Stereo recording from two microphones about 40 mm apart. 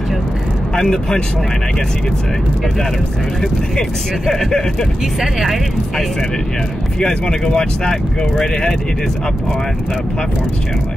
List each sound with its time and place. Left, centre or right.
0.7 s speech: centre
4.3 s speech: centre
5.2 s speech: centre
7.0 s speech: centre